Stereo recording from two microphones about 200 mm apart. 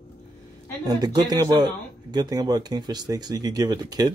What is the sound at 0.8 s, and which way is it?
Speech, 20° right (ahead or behind).